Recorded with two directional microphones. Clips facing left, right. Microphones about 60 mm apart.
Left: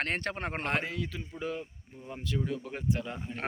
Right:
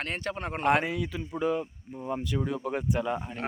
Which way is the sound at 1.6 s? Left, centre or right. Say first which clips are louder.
Right 8 dB; right.